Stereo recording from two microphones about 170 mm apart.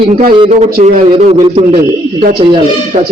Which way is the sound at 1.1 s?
30° right (ahead or behind).